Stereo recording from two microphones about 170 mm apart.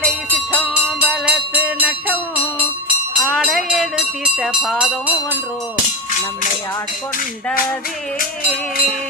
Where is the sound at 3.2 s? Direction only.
Centre (ahead or behind).